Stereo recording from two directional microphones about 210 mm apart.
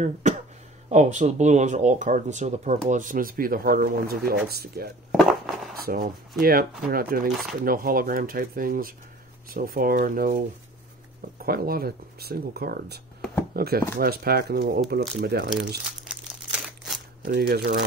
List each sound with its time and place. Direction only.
0.0 s speech: 35° right (ahead or behind)
5.1 s a sound: centre (ahead or behind)
6.4 s speech: 45° right (ahead or behind)
7.2 s speech: centre (ahead or behind)
7.6 s speech: 45° right (ahead or behind)
11.4 s speech: 45° right (ahead or behind)
16.0 s crumpling: 5° right (ahead or behind)
17.2 s speech: 45° right (ahead or behind)